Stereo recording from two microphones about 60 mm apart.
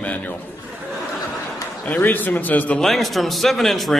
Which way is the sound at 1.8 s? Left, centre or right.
Left.